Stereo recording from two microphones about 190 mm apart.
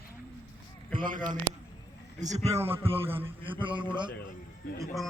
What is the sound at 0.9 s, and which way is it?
Speech, 45° right (ahead or behind).